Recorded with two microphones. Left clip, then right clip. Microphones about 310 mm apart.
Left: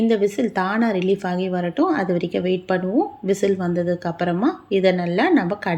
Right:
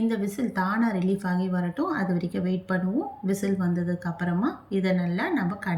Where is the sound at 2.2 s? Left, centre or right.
Left.